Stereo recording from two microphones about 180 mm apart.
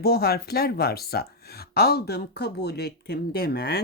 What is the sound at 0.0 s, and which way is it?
Speech, 60° left (ahead or behind).